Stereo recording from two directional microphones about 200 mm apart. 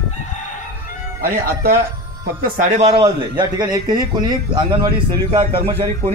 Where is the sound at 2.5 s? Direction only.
35° right (ahead or behind).